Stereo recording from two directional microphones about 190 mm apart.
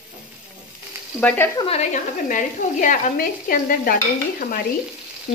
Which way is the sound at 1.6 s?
35° left (ahead or behind).